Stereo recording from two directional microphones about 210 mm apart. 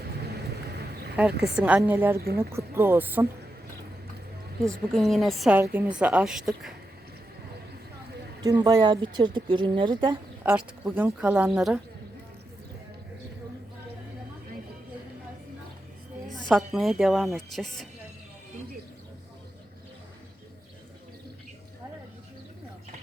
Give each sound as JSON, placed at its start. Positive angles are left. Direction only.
{"t": 1.5, "sound": "speech", "side_deg": -5}
{"t": 4.6, "sound": "a woman's voice", "side_deg": 0}
{"t": 8.4, "sound": "speech", "side_deg": -20}
{"t": 10.4, "sound": "a woman's voice", "side_deg": -5}
{"t": 16.5, "sound": "a woman's voice", "side_deg": 0}